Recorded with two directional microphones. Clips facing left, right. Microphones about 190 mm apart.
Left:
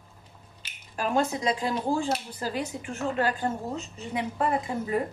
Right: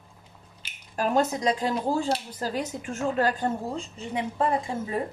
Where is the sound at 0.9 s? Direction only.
40° right (ahead or behind).